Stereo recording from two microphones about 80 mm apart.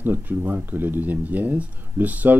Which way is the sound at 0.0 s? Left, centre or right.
Right.